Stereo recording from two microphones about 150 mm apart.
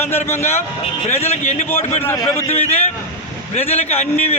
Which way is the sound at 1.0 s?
45° left (ahead or behind).